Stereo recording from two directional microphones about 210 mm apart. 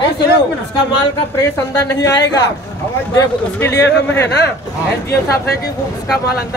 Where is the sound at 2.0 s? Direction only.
55° left (ahead or behind).